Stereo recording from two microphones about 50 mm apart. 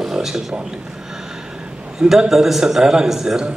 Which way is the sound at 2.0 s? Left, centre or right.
Centre.